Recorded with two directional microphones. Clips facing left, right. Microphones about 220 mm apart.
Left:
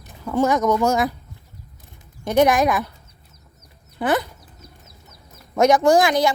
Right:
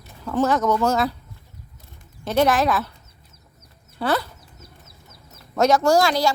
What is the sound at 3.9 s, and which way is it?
Chicken, 15° left (ahead or behind).